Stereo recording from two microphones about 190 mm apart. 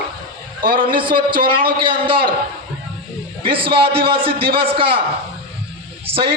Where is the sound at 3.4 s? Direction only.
30° right (ahead or behind).